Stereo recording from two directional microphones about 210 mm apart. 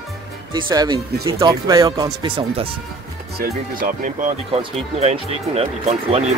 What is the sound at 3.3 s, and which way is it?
Speech, 45° right (ahead or behind).